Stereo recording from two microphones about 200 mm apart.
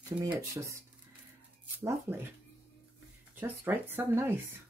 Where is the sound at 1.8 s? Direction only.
10° right (ahead or behind).